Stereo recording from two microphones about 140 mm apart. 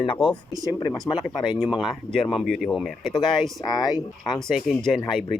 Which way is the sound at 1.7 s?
Centre (ahead or behind).